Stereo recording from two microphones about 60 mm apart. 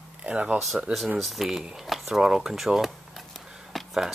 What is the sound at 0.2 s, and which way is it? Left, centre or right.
Speech, centre.